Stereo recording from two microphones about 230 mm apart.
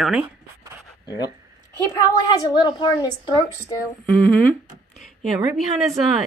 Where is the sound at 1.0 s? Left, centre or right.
Centre.